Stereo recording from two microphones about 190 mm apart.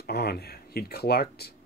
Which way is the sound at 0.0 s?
55° left (ahead or behind).